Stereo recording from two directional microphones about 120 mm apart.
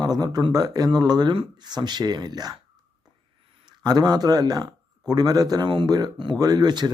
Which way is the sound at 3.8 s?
35° right (ahead or behind).